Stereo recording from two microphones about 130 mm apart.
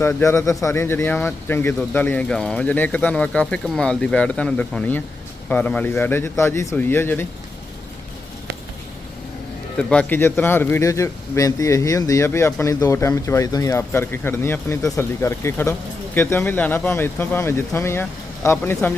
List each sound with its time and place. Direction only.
0.0 s speech: 20° left (ahead or behind)
9.7 s a man's voice: 10° left (ahead or behind)